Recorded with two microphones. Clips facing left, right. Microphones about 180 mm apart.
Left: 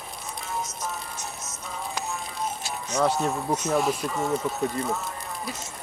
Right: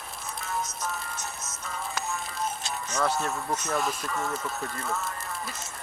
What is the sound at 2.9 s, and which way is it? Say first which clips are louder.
Speech: left 4 dB; 15° left (ahead or behind).